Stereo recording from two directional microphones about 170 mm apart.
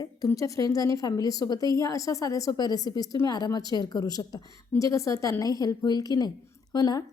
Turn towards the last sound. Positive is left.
turn(degrees=20)  # may be behind; listen again after turning